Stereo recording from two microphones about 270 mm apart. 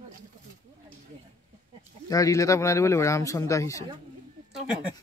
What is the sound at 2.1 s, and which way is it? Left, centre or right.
A man's voice, centre.